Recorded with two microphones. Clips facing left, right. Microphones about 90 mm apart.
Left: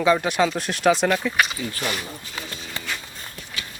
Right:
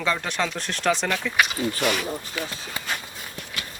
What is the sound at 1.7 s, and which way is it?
Speech, 65° right (ahead or behind).